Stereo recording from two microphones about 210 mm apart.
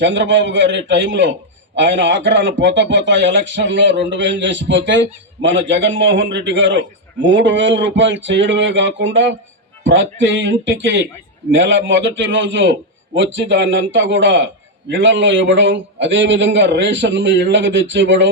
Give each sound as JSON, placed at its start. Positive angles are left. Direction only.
{"t": 0.0, "sound": "a man's voice", "side_deg": -60}